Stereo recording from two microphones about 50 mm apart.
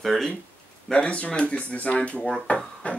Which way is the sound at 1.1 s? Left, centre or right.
Left.